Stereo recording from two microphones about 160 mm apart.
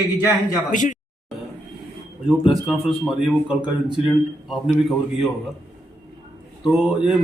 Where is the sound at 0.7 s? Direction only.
50° left (ahead or behind).